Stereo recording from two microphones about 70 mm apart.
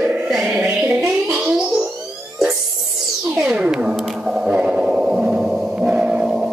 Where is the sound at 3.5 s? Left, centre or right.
Centre.